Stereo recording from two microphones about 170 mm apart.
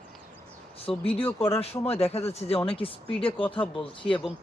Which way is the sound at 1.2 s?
15° left (ahead or behind).